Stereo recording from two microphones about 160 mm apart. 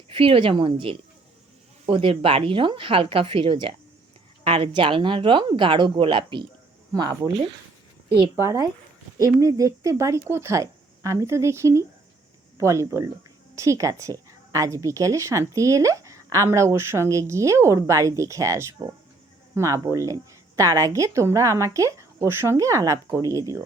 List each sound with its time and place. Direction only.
0.1 s a woman's voice: 35° right (ahead or behind)
8.4 s a woman's voice: 20° right (ahead or behind)